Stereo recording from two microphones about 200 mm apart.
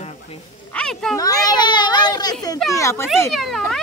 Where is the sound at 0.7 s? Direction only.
5° left (ahead or behind).